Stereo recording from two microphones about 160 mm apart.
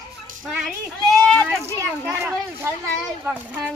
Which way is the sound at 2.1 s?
15° right (ahead or behind).